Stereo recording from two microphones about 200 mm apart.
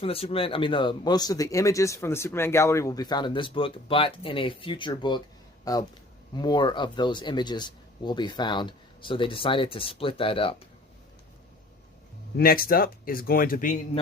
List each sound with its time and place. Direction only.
0.0 s speech: 30° left (ahead or behind)
12.4 s speech: 45° left (ahead or behind)